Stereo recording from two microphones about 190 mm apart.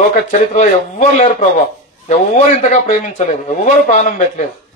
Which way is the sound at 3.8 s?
40° left (ahead or behind).